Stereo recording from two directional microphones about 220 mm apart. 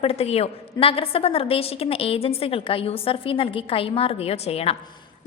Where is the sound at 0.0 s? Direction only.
25° left (ahead or behind).